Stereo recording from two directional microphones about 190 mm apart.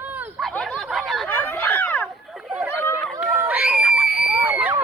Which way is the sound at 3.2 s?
5° right (ahead or behind).